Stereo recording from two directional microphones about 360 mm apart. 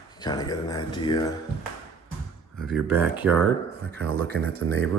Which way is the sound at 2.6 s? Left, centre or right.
Centre.